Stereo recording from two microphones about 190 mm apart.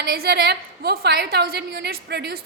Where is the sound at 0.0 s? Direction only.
60° right (ahead or behind).